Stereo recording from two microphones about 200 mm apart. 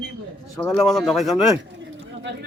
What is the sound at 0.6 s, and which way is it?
Speech, 5° left (ahead or behind).